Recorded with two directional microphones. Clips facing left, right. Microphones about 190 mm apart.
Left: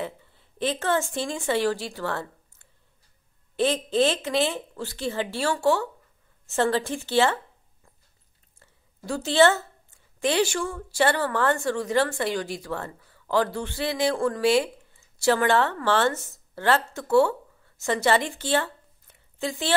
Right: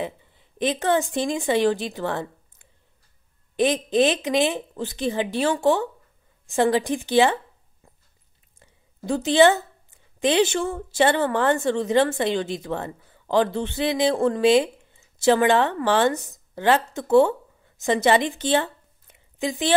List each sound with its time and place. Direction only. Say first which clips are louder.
0.0 s speech: right 3 dB; 15° right (ahead or behind)
8.5 s a woman's voice: right 7 dB; 20° right (ahead or behind)